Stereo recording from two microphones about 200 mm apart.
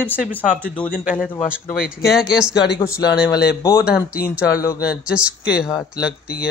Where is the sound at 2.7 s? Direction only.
15° left (ahead or behind).